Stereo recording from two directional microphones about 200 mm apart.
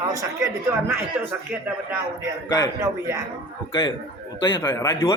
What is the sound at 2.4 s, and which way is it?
Speech, 20° left (ahead or behind).